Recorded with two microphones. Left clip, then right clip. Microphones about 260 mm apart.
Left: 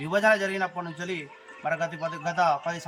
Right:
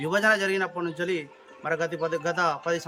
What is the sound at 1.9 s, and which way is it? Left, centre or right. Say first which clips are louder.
Speech: right 1 dB; right.